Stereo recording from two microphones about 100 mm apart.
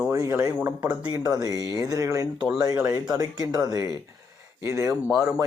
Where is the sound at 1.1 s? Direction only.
40° right (ahead or behind).